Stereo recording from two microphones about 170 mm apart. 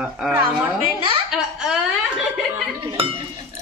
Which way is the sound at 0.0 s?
5° right (ahead or behind).